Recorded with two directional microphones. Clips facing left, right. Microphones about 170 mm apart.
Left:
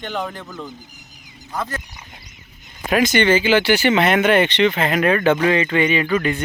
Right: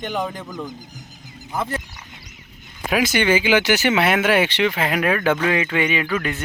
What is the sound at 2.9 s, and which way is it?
Speech, 5° right (ahead or behind).